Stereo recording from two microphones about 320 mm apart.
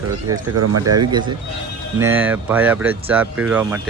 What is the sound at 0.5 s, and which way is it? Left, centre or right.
Speech, right.